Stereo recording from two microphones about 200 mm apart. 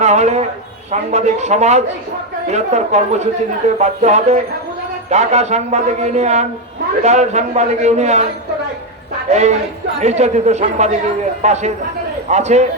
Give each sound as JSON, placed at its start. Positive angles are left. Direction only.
{"t": 0.0, "sound": "a man's voice", "side_deg": -35}
{"t": 9.3, "sound": "speech", "side_deg": -35}